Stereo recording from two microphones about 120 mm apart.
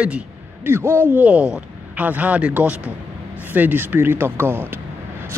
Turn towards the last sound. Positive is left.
turn(degrees=-20)  # may be behind; listen again after turning